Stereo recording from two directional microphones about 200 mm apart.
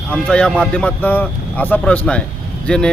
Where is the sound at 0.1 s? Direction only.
5° left (ahead or behind).